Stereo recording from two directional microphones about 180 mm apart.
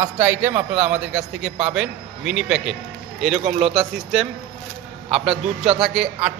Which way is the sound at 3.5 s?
35° right (ahead or behind).